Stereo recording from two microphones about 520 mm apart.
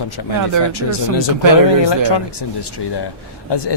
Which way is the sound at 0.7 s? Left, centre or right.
Left.